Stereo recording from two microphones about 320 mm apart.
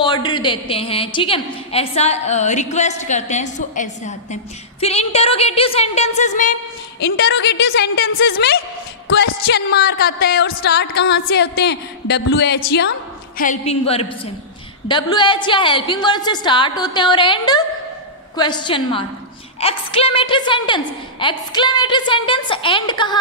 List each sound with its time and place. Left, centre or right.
0.0 s a woman's voice: centre
7.0 s music: left
13.4 s a woman's voice: left